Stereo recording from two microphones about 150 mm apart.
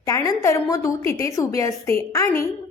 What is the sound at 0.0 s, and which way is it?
A woman's voice, 25° left (ahead or behind).